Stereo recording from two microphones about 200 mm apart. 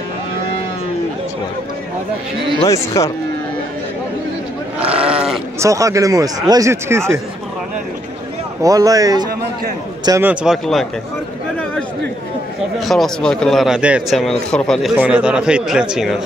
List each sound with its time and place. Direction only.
2.7 s speech: 15° left (ahead or behind)
4.7 s sheep: 5° right (ahead or behind)
5.6 s speech: 15° right (ahead or behind)
8.6 s speech: 15° right (ahead or behind)
10.4 s speech: centre (ahead or behind)
12.8 s speech: centre (ahead or behind)